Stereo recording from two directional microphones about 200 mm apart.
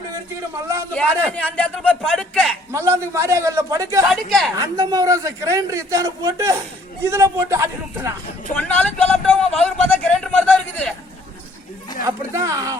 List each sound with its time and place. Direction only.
0.9 s a man's voice: 5° left (ahead or behind)
2.7 s a man's voice: 15° right (ahead or behind)
4.1 s a man's voice: centre (ahead or behind)
4.5 s a man's voice: 15° right (ahead or behind)
8.5 s a sound: 5° left (ahead or behind)
12.0 s a man's voice: 15° right (ahead or behind)